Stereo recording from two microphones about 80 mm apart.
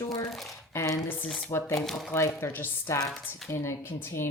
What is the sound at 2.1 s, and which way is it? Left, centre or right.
Speech, left.